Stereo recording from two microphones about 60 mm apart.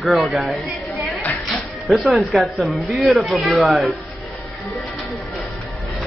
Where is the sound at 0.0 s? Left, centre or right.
Centre.